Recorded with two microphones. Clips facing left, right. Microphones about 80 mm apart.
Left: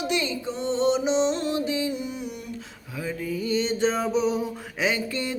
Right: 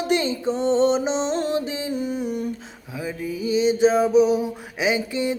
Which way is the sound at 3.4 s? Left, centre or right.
Centre.